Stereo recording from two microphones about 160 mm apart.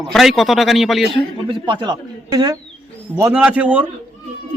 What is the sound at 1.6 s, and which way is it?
Speech, 30° right (ahead or behind).